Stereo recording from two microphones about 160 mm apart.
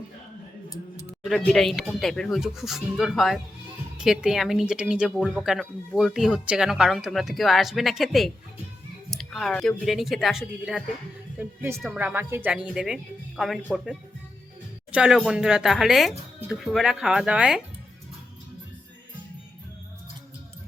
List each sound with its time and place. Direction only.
0.7 s clicking: 20° left (ahead or behind)
1.2 s speech: centre (ahead or behind)
11.3 s a woman's voice: 15° right (ahead or behind)
14.9 s speech: 5° right (ahead or behind)